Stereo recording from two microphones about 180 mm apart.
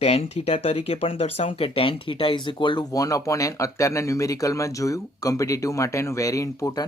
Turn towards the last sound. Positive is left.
turn(degrees=20)  # may be behind; listen again after turning